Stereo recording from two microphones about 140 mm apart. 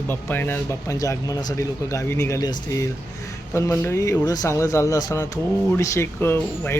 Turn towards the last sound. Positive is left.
turn(degrees=15)  # may be behind; listen again after turning